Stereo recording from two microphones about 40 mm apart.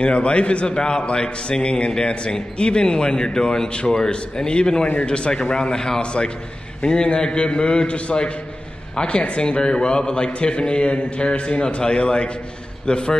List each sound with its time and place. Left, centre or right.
0.0 s a man's voice: left
4.8 s speech: left
5.1 s a man's voice: left